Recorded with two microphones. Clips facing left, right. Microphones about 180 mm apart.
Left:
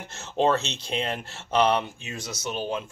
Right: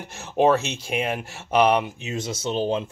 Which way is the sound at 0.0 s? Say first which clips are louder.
Right 4 dB; 15° right (ahead or behind).